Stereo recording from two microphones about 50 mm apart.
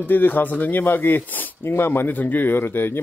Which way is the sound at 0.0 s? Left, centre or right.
Left.